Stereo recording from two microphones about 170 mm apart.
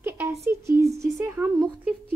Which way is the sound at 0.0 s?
15° right (ahead or behind).